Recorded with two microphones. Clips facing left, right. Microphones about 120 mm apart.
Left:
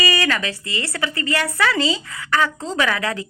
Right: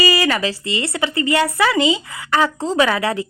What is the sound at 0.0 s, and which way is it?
A woman's voice, 30° right (ahead or behind).